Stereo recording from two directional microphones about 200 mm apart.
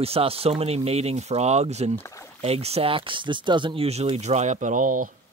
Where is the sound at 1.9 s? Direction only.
15° left (ahead or behind).